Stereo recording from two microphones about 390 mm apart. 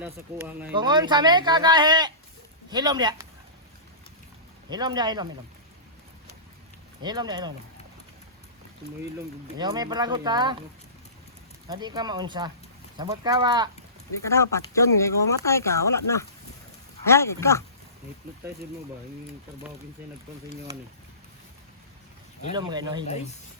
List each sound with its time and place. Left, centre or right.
0.0 s speech: centre
4.7 s speech: centre
7.0 s speech: centre
9.6 s speech: centre
11.8 s speech: centre
14.3 s speech: centre
22.5 s speech: centre
23.0 s speech: centre